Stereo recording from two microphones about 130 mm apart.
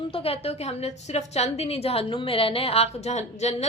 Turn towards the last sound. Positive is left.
turn(degrees=55)  # may be behind; listen again after turning